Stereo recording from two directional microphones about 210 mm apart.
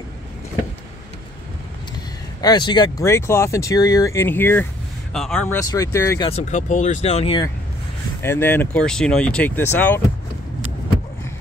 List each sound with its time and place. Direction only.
2.4 s speech: 20° left (ahead or behind)
6.3 s speech: 35° left (ahead or behind)
8.2 s speech: 10° left (ahead or behind)